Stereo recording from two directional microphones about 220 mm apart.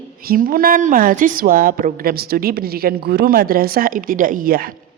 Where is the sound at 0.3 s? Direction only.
40° right (ahead or behind).